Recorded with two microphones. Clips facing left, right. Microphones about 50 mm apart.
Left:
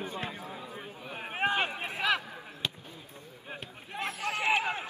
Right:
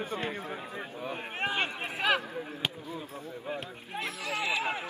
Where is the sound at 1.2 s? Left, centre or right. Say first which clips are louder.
Left 3 dB; centre.